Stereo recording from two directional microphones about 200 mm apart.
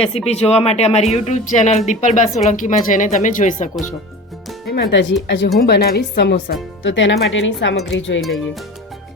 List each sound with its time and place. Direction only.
0.0 s speech: 30° left (ahead or behind)
4.7 s speech: 55° left (ahead or behind)